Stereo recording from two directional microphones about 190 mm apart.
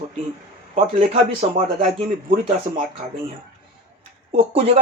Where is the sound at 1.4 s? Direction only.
30° right (ahead or behind).